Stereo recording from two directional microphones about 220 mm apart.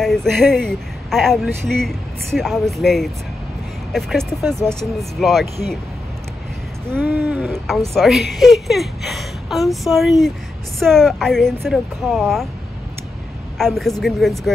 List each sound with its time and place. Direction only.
0.0 s speech: centre (ahead or behind)
6.9 s speech: 10° right (ahead or behind)
13.6 s speech: centre (ahead or behind)